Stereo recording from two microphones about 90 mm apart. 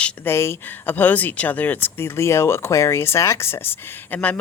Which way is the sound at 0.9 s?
20° left (ahead or behind).